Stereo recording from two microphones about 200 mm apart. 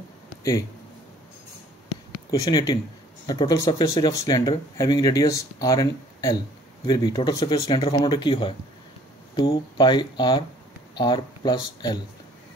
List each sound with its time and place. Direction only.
0.4 s speech: 15° left (ahead or behind)
2.3 s speech: 15° left (ahead or behind)